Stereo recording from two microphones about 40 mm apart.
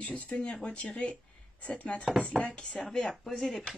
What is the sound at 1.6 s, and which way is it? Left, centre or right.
Speech, left.